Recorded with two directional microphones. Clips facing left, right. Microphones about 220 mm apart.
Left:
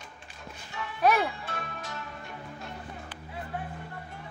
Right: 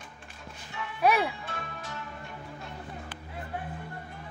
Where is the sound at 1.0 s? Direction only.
5° right (ahead or behind).